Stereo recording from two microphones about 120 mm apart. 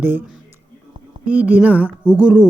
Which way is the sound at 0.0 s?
15° right (ahead or behind).